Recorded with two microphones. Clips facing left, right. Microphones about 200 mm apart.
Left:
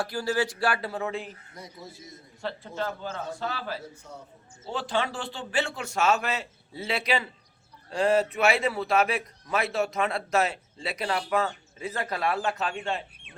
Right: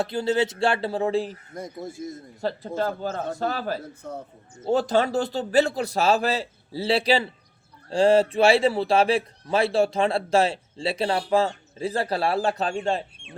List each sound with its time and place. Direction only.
0.0 s speech: 25° right (ahead or behind)
1.5 s a man's voice: 50° right (ahead or behind); by 13.3 s 35° right (ahead or behind)